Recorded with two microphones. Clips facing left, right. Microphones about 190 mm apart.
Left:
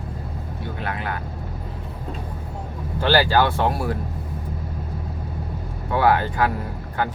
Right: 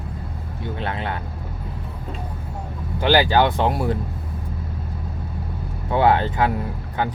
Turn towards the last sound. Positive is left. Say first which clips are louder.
# right 1 dB
turn(degrees=-20)  # may be behind; listen again after turning